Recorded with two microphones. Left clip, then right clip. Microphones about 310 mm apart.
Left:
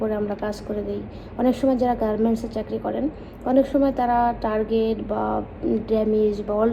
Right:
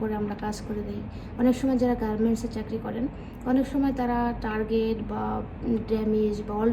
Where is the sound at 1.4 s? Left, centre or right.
Centre.